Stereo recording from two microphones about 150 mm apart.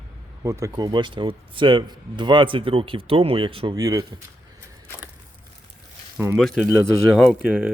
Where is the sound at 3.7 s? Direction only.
25° right (ahead or behind).